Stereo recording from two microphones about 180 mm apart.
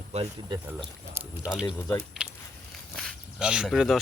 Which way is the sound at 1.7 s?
15° left (ahead or behind).